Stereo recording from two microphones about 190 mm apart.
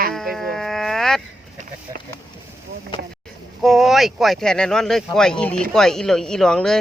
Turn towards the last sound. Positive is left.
turn(degrees=5)  # may be behind; listen again after turning